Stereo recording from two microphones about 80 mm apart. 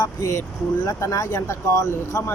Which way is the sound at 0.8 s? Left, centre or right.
Left.